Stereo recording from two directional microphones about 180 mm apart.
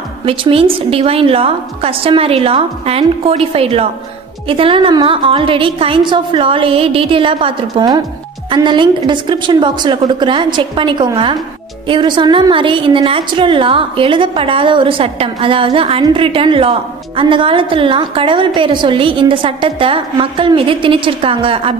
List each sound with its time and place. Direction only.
0.2 s a woman's voice: 30° right (ahead or behind)